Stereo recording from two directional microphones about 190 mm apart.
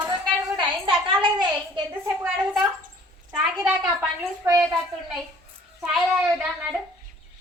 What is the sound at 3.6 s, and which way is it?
Speech, 5° right (ahead or behind).